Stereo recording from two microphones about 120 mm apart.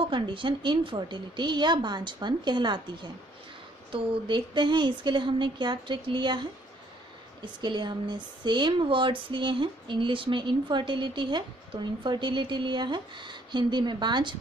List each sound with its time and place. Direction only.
0.1 s speech: 45° right (ahead or behind)
7.6 s speech: 40° right (ahead or behind)